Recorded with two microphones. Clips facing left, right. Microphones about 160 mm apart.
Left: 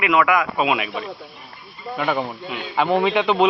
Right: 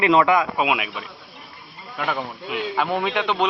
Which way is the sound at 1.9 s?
5° left (ahead or behind).